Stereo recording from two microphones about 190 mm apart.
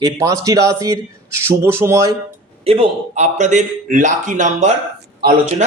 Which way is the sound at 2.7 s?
35° right (ahead or behind).